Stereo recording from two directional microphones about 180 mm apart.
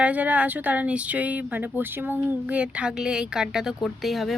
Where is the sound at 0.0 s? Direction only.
10° right (ahead or behind).